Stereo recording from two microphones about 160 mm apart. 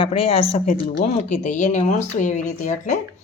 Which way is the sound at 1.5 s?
50° left (ahead or behind).